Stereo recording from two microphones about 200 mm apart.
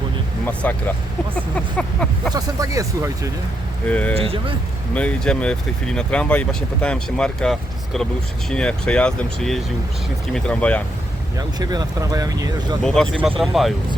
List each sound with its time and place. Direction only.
0.6 s vehicle: 10° left (ahead or behind)
2.3 s speech: 15° right (ahead or behind)
3.8 s vehicle: 5° left (ahead or behind)
4.1 s speech: 30° right (ahead or behind)
4.9 s speech: 5° left (ahead or behind)
11.3 s speech: 20° right (ahead or behind)
12.8 s speech: 5° left (ahead or behind)